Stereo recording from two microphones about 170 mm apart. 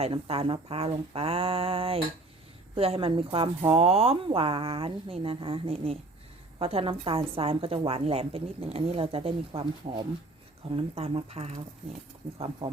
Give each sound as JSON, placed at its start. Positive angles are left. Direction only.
{"t": 0.0, "sound": "a woman's voice", "side_deg": -35}